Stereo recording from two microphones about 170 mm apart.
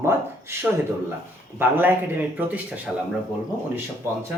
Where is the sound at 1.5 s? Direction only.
10° right (ahead or behind).